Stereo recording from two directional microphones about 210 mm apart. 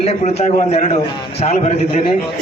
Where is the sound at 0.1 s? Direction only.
30° left (ahead or behind).